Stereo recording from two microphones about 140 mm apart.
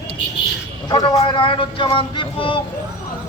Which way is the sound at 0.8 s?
30° left (ahead or behind).